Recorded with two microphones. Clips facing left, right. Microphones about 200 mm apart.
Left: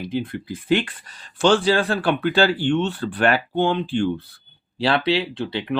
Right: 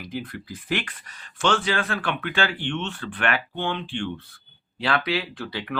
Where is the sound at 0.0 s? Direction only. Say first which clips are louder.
Left 7 dB; 25° left (ahead or behind).